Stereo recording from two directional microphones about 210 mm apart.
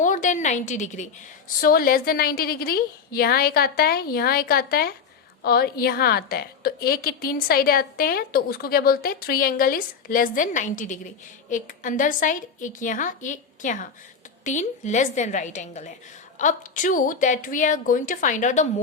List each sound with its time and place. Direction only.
0.0 s a woman's voice: 35° left (ahead or behind)